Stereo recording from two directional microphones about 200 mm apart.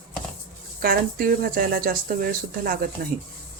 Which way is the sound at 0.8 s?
45° right (ahead or behind).